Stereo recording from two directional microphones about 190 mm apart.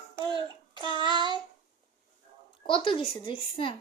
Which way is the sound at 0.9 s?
25° right (ahead or behind).